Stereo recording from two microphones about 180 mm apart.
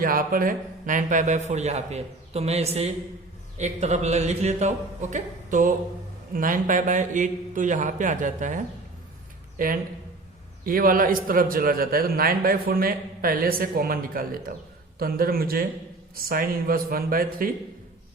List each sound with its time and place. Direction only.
0.0 s a man's voice: 50° right (ahead or behind)